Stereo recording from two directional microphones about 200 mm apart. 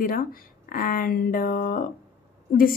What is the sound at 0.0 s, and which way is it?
A woman's voice, 45° left (ahead or behind).